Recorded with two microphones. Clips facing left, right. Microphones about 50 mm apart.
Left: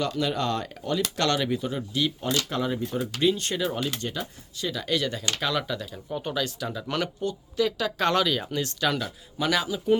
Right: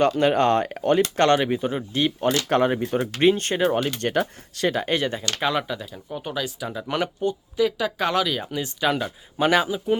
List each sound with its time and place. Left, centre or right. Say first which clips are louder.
0.2 s speech: right 8 dB; right
1.0 s speech: right 6 dB; right
2.5 s speech: right 7 dB; right
4.0 s speech: right 9 dB; right
4.7 s speech: even; right
5.4 s speech: right 5 dB; right